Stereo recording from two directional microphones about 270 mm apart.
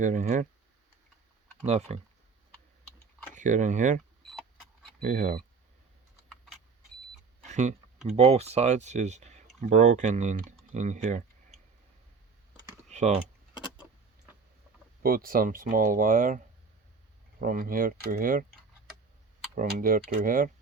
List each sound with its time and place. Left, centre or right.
0.0 s speech: right
1.6 s speech: right
3.3 s speech: right
4.2 s vehicle: centre
5.0 s speech: right
7.4 s a sound: right
8.1 s speech: right
12.9 s typing: right
15.0 s speech: right
17.4 s speech: right
19.5 s speech: right